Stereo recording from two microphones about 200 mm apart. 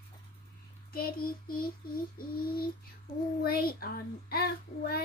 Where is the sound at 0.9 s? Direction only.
45° left (ahead or behind).